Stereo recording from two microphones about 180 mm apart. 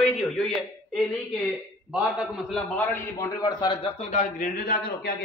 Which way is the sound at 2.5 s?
10° left (ahead or behind).